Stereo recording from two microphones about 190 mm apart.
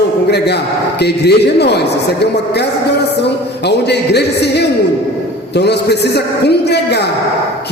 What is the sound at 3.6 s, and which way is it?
A man's voice, 60° left (ahead or behind).